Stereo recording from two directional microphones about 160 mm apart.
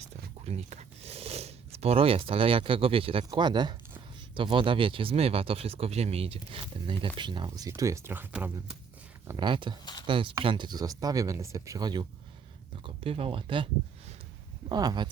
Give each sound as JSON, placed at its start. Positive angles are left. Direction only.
{"t": 0.4, "sound": "a sound", "side_deg": -45}
{"t": 3.2, "sound": "speech", "side_deg": -30}
{"t": 9.2, "sound": "speech", "side_deg": -25}
{"t": 14.7, "sound": "speech", "side_deg": -25}